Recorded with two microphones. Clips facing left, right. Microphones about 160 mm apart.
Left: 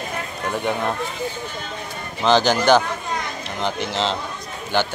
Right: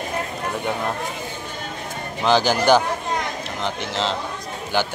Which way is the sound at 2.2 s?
10° right (ahead or behind).